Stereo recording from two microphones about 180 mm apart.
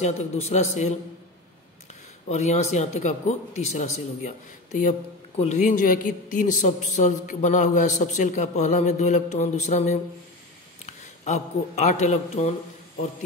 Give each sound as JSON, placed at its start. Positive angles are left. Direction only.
{"t": 0.0, "sound": "a man's voice", "side_deg": 40}
{"t": 2.2, "sound": "a man's voice", "side_deg": 40}
{"t": 5.6, "sound": "a man's voice", "side_deg": 50}